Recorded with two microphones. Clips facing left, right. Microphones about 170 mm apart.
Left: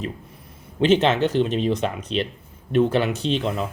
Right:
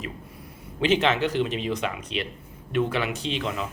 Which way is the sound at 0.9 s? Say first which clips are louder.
Left 2 dB; 25° left (ahead or behind).